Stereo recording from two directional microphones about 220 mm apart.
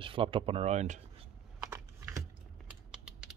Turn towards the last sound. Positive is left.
turn(degrees=-5)  # may be behind; listen again after turning